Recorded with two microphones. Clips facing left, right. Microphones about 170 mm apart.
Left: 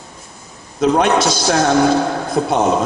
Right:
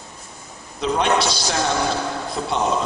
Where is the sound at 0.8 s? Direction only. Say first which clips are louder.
Left 6 dB; 45° left (ahead or behind).